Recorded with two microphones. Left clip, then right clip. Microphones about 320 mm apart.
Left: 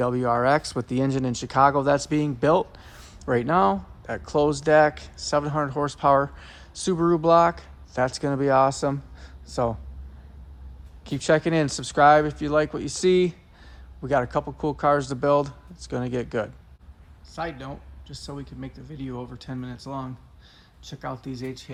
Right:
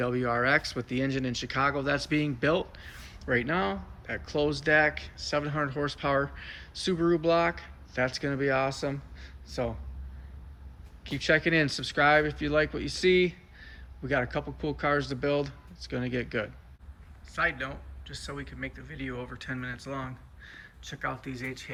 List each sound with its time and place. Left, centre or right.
0.0 s speech: centre
11.1 s speech: centre